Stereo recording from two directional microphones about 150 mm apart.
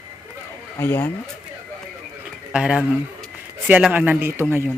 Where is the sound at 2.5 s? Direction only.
5° right (ahead or behind).